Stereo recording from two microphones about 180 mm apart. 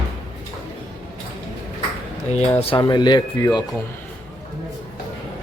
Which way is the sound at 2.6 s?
35° left (ahead or behind).